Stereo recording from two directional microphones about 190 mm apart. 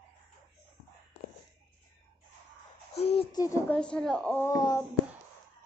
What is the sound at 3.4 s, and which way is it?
Speech, 15° left (ahead or behind).